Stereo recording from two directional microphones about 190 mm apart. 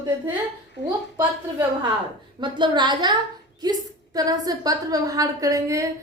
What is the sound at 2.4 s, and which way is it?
A woman's voice, 25° right (ahead or behind).